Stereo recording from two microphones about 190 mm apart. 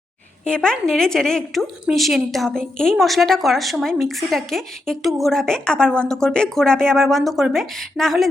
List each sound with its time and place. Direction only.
0.4 s a woman's voice: 5° left (ahead or behind)